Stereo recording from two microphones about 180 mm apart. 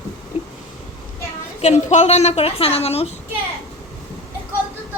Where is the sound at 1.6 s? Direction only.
40° left (ahead or behind).